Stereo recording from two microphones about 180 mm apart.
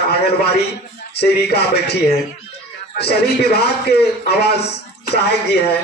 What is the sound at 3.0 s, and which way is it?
A man's voice, 65° left (ahead or behind).